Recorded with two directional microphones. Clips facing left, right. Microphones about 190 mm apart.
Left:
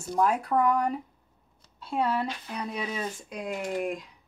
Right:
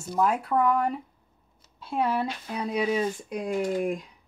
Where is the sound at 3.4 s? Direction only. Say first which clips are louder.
Right 4 dB; 25° right (ahead or behind).